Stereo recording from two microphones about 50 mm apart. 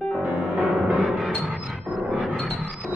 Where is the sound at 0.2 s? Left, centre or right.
Right.